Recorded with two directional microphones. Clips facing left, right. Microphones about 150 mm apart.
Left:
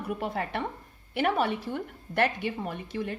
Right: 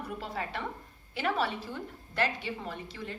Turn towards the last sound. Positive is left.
turn(degrees=55)  # may be behind; listen again after turning